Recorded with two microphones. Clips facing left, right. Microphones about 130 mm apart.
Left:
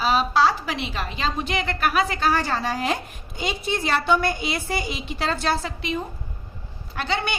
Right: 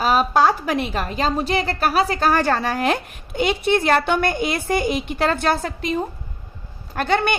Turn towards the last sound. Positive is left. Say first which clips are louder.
# right 6 dB
turn(degrees=-50)  # may be behind; listen again after turning